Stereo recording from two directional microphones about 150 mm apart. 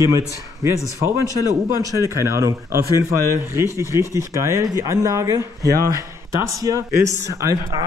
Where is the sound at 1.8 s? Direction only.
20° right (ahead or behind).